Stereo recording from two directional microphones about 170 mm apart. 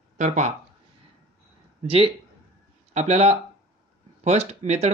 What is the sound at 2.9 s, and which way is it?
Speech, 40° right (ahead or behind).